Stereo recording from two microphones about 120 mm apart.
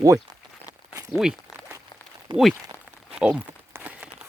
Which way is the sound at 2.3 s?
40° right (ahead or behind).